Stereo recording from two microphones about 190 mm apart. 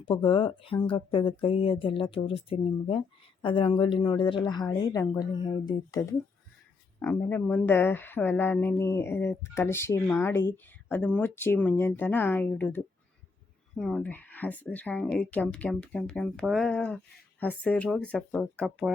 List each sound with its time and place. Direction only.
0.0 s speech: 25° left (ahead or behind)
7.0 s speech: 10° left (ahead or behind)